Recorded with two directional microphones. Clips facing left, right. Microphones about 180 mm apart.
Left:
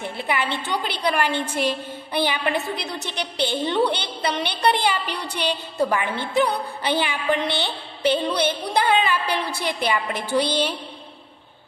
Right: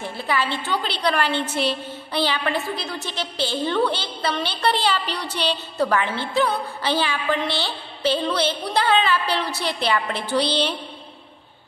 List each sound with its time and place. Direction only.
0.2 s a woman's voice: 20° left (ahead or behind)